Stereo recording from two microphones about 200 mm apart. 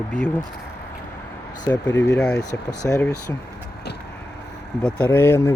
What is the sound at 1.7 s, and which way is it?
Speech, 10° left (ahead or behind).